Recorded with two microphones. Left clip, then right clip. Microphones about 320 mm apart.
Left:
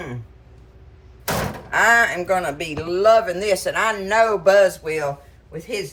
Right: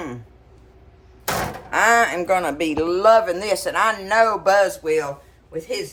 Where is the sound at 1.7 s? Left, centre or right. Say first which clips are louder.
Left 1 dB; right.